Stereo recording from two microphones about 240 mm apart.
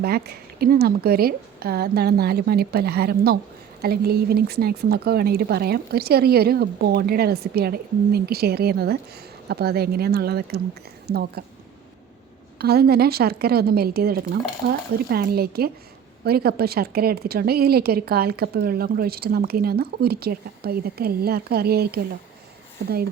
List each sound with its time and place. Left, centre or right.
0.0 s a woman's voice: right
12.5 s speech: right